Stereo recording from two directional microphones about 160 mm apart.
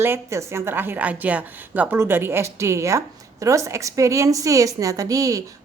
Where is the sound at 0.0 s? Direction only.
15° right (ahead or behind).